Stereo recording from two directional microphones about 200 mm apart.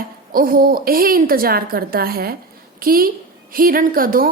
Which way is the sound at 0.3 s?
45° right (ahead or behind).